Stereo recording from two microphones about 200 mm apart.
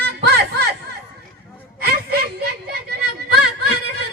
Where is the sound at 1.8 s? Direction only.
50° right (ahead or behind).